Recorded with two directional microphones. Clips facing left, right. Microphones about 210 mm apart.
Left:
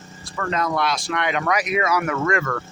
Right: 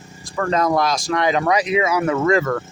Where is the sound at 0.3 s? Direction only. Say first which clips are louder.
Right 5 dB; 40° right (ahead or behind); by 2.3 s 25° right (ahead or behind).